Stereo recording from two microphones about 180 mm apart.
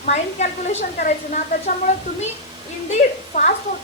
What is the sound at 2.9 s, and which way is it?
Speech, 40° left (ahead or behind).